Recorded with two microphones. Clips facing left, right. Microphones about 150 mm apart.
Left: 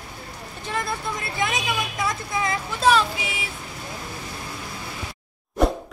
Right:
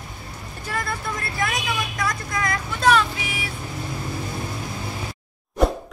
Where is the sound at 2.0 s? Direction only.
25° left (ahead or behind).